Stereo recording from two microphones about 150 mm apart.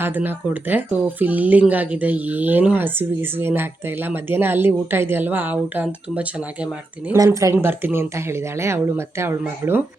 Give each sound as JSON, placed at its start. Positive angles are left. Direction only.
{"t": 0.0, "sound": "speech", "side_deg": -15}
{"t": 7.2, "sound": "speech", "side_deg": -20}